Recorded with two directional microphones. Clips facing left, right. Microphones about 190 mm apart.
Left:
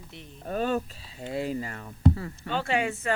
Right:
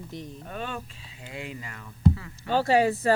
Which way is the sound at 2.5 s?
35° right (ahead or behind).